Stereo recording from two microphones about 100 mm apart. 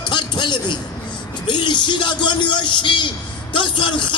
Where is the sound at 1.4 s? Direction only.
50° left (ahead or behind).